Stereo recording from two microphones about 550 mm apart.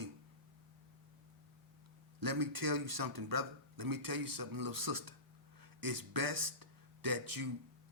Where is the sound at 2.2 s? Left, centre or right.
Right.